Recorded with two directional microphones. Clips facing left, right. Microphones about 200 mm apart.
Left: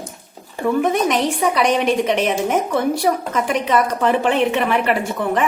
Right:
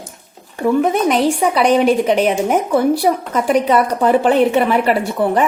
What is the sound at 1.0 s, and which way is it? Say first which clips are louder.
A woman's voice: right 4 dB; 35° right (ahead or behind).